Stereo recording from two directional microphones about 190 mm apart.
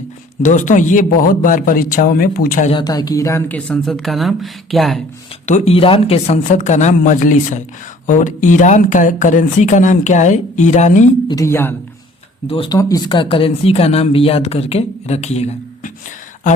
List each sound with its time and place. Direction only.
0.4 s speech: 40° left (ahead or behind)
2.6 s speech: 25° left (ahead or behind); by 5.0 s centre (ahead or behind)
5.5 s speech: 35° left (ahead or behind)
11.3 s a woman's voice: 15° left (ahead or behind)
12.5 s speech: 25° left (ahead or behind)